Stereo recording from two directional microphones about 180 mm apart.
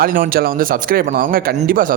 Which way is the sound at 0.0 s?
50° right (ahead or behind).